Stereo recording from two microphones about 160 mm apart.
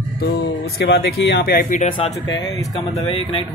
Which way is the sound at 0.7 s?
85° left.